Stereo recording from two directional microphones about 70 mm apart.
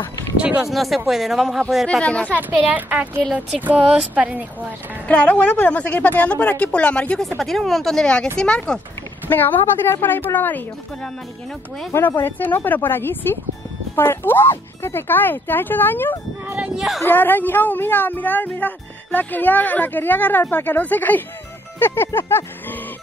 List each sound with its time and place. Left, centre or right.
0.4 s speech: centre
0.7 s speech: centre
1.9 s speech: centre
2.7 s speech: right
5.0 s a woman's voice: centre
7.2 s speech: centre
9.3 s a woman's voice: left
12.2 s a woman's voice: left
16.4 s speech: centre
17.0 s a woman's voice: left